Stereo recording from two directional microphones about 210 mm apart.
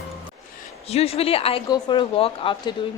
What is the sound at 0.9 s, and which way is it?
A woman's voice, 30° left (ahead or behind).